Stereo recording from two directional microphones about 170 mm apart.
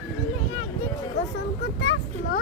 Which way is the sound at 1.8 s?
90° left.